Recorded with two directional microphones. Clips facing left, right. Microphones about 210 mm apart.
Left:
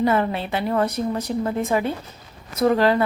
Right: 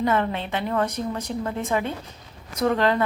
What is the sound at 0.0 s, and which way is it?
A woman's voice, 10° left (ahead or behind).